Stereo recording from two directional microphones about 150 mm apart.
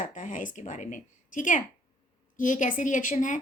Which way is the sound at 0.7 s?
55° left (ahead or behind).